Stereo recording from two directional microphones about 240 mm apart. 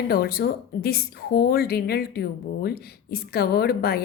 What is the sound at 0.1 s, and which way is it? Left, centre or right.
A woman's voice, left.